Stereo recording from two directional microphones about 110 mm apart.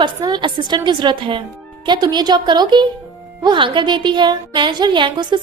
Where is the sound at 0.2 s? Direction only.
40° right (ahead or behind).